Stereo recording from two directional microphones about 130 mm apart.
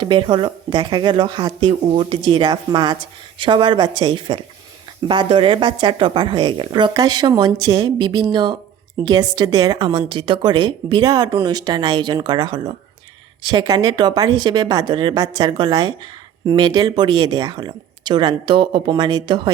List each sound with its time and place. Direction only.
0.0 s speech: 40° right (ahead or behind)